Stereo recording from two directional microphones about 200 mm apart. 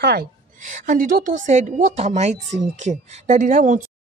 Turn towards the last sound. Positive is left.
turn(degrees=-40)  # may be behind; listen again after turning